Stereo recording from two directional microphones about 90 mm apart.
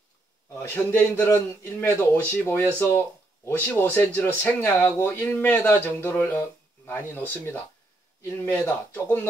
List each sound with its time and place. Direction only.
0.6 s speech: 25° left (ahead or behind)